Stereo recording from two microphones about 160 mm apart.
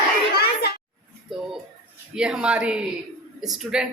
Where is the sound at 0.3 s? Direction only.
75° left (ahead or behind).